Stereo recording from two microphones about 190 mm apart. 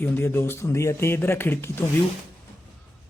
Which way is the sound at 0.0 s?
10° left (ahead or behind).